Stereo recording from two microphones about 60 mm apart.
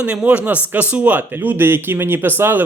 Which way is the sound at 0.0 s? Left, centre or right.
Right.